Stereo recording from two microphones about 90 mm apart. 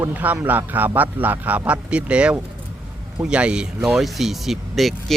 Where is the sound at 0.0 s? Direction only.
20° right (ahead or behind).